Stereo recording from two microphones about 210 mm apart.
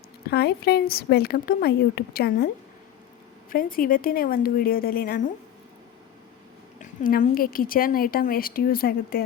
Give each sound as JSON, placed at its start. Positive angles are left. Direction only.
{"t": 0.3, "sound": "a woman's voice", "side_deg": 50}
{"t": 3.5, "sound": "a woman's voice", "side_deg": 45}
{"t": 6.7, "sound": "a woman's voice", "side_deg": 40}